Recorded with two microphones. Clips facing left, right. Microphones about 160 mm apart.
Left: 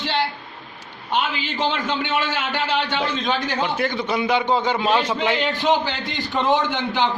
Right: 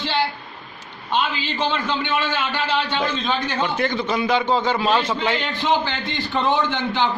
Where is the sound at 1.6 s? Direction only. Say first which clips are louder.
Even; 20° left (ahead or behind).